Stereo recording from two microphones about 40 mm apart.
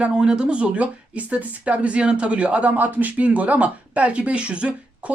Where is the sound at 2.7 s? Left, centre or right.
Right.